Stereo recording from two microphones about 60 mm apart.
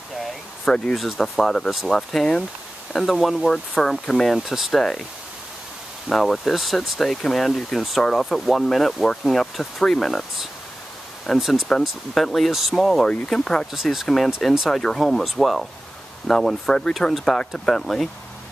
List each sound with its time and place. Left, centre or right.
0.7 s speech: centre
0.9 s speech: centre
4.4 s speech: centre
6.0 s speech: centre
12.1 s speech: centre
13.3 s speech: centre